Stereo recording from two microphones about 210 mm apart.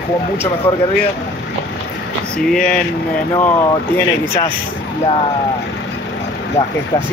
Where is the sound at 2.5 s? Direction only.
5° left (ahead or behind).